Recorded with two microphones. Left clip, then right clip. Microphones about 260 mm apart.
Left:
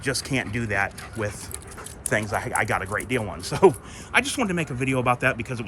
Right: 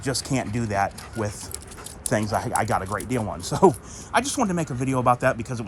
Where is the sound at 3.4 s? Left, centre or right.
Centre.